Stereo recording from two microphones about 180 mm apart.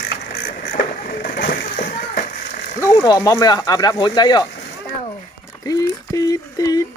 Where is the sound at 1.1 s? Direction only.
50° left (ahead or behind).